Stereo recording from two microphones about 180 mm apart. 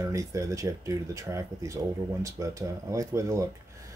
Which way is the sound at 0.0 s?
15° right (ahead or behind).